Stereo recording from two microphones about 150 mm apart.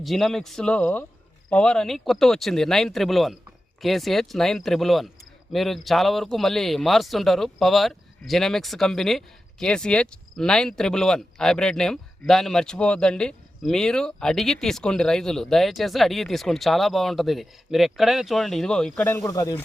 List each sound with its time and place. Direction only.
0.0 s speech: centre (ahead or behind)
19.1 s speech: 20° left (ahead or behind)